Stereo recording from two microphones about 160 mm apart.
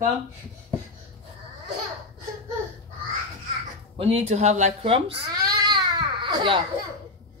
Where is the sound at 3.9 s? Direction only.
40° right (ahead or behind).